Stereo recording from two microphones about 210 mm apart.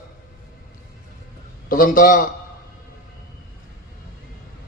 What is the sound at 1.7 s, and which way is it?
Speech, 40° left (ahead or behind).